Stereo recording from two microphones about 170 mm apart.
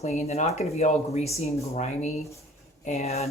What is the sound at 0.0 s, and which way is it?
Speech, 40° left (ahead or behind).